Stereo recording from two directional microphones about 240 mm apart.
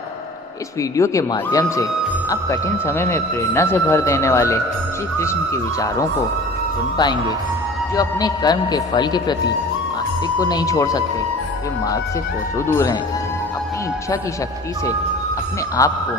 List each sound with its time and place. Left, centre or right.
0.8 s speech: centre
10.4 s speech: centre
12.5 s speech: centre
15.8 s speech: centre